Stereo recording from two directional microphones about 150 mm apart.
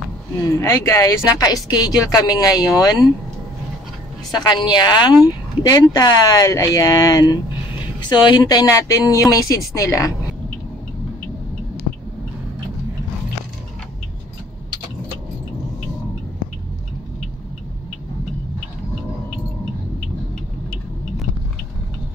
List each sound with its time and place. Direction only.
0.5 s speech: 20° left (ahead or behind)
4.3 s speech: 30° left (ahead or behind)